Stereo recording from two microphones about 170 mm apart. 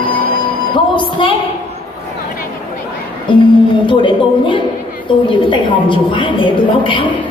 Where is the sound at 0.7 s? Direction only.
30° left (ahead or behind).